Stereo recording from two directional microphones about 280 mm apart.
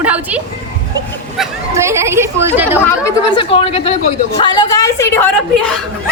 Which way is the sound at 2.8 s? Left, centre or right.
Centre.